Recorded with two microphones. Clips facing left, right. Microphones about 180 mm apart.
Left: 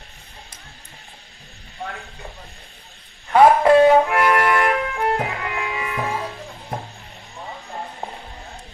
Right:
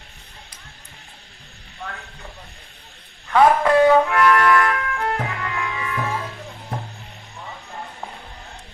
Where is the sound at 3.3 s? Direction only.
25° left (ahead or behind).